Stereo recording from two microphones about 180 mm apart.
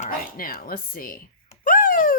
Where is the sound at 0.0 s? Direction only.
55° left (ahead or behind).